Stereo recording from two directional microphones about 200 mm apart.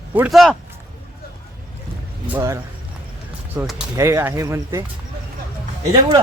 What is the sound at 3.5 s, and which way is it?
Speech, centre (ahead or behind).